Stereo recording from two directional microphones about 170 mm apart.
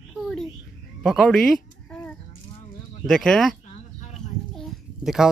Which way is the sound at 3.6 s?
45° left (ahead or behind).